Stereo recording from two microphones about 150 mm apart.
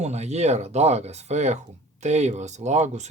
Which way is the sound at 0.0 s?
50° right (ahead or behind).